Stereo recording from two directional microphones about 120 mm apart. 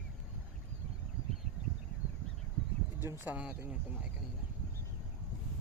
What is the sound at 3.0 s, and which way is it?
Speech, 20° right (ahead or behind).